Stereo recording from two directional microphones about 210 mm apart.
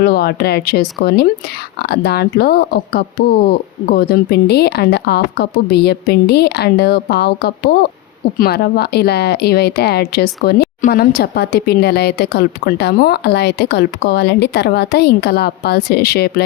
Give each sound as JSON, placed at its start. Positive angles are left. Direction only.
{"t": 0.0, "sound": "a woman's voice", "side_deg": 50}